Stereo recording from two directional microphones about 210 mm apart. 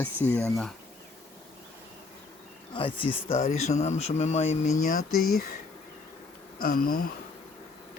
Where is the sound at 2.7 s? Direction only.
25° left (ahead or behind); by 5.4 s 40° left (ahead or behind).